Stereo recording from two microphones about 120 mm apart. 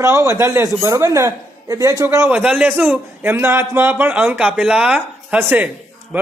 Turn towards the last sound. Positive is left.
turn(degrees=-10)  # may be behind; listen again after turning